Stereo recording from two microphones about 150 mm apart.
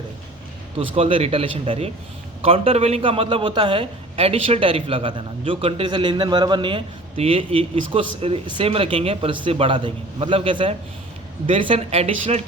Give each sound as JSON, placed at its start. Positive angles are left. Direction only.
{"t": 0.8, "sound": "a man's voice", "side_deg": -40}